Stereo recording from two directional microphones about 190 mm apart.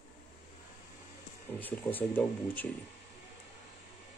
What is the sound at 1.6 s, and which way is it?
Speech, 10° left (ahead or behind).